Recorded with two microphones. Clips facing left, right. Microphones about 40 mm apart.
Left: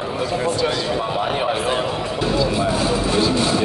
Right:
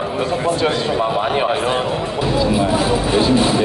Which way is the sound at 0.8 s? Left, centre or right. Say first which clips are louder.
Right 4 dB; centre.